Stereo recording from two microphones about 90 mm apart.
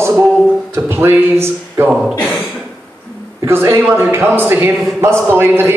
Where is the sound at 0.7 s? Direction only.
25° right (ahead or behind).